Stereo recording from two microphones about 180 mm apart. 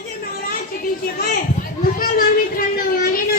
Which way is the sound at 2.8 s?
50° left (ahead or behind).